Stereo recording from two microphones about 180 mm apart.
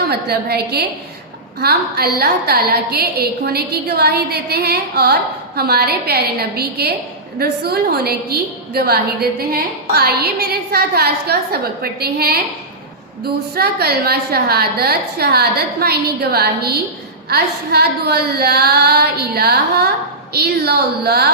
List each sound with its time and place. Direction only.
0.1 s a woman's voice: 60° right (ahead or behind)
13.6 s a woman's voice: 60° right (ahead or behind)